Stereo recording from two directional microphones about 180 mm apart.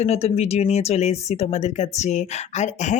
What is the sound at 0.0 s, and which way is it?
Speech, 35° left (ahead or behind).